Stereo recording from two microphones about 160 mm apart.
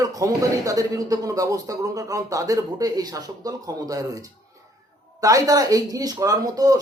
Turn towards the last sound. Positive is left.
turn(degrees=-25)  # may be behind; listen again after turning